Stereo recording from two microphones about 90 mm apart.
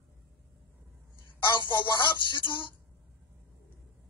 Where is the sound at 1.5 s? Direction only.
60° left (ahead or behind).